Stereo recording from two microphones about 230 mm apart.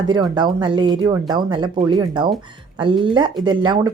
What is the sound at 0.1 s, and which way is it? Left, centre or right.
A woman's voice, centre.